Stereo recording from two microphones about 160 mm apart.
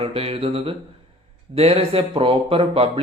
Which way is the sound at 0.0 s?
35° right (ahead or behind).